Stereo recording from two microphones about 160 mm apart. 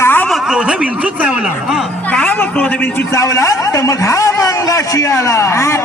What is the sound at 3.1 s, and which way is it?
A man's voice, 20° left (ahead or behind).